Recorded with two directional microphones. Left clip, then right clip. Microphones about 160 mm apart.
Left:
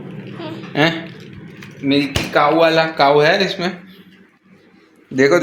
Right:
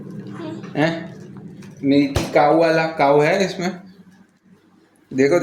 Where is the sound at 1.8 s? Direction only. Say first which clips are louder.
Even; 5° left (ahead or behind).